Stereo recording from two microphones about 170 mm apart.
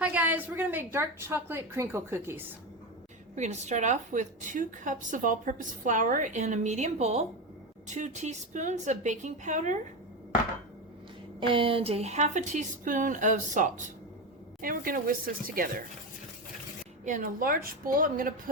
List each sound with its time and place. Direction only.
0.0 s a woman's voice: 10° right (ahead or behind)
3.3 s a woman's voice: 45° right (ahead or behind)
11.3 s a woman's voice: 30° right (ahead or behind); by 15.8 s 55° right (ahead or behind)
17.1 s a woman's voice: 55° right (ahead or behind)